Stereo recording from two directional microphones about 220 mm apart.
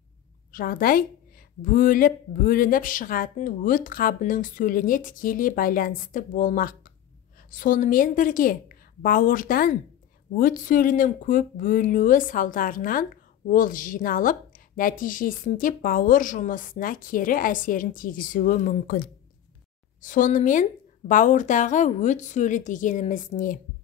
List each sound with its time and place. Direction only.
0.5 s a woman's voice: 40° left (ahead or behind)